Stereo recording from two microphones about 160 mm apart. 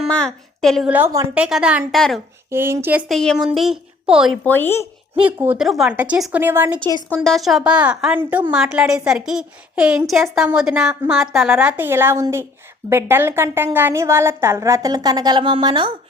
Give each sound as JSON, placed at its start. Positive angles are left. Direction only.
{"t": 0.1, "sound": "a woman's voice", "side_deg": 5}
{"t": 0.9, "sound": "a woman's voice", "side_deg": -15}
{"t": 1.3, "sound": "a woman's voice", "side_deg": -5}
{"t": 2.5, "sound": "a woman's voice", "side_deg": -15}
{"t": 3.1, "sound": "a woman's voice", "side_deg": 0}
{"t": 4.4, "sound": "speech", "side_deg": 15}
{"t": 5.2, "sound": "a woman's voice", "side_deg": -10}
{"t": 7.2, "sound": "a woman's voice", "side_deg": 0}